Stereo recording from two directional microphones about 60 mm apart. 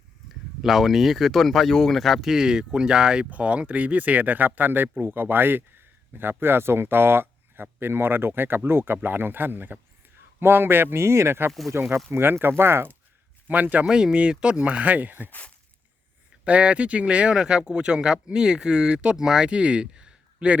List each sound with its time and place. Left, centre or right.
0.6 s speech: centre; by 13.0 s right
13.5 s speech: right
13.8 s speech: centre; by 15.3 s right
15.3 s speech: left
16.4 s speech: centre